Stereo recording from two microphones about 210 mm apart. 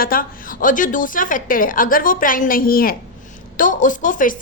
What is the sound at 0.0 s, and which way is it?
A woman's voice, 45° left (ahead or behind).